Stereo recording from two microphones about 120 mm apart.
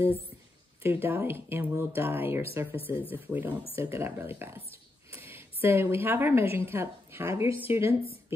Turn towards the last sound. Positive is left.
turn(degrees=-20)  # may be behind; listen again after turning